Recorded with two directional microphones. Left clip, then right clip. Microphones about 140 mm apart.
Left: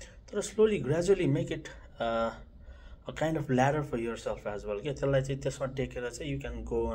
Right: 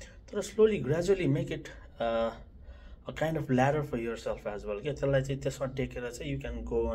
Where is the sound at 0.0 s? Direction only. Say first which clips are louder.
Left 1 dB; 25° left (ahead or behind).